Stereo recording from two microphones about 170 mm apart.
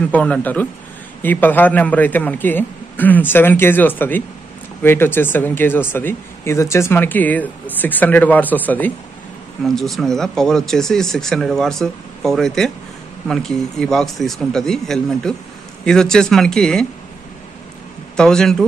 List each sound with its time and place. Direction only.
0.1 s speech: 10° left (ahead or behind)
18.1 s speech: 5° left (ahead or behind)